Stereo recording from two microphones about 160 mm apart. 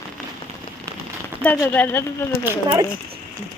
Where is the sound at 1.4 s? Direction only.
10° left (ahead or behind).